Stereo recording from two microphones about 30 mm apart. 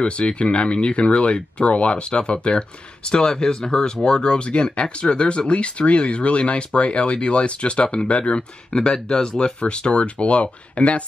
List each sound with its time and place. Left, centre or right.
0.0 s speech: left